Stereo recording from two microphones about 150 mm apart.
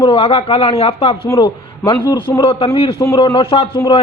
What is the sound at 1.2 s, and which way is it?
A man's voice, 25° left (ahead or behind).